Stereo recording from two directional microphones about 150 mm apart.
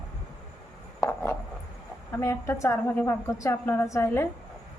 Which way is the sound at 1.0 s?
15° left (ahead or behind).